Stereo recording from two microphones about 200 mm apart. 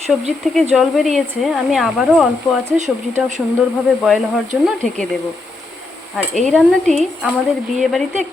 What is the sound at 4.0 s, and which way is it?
Speech, centre (ahead or behind).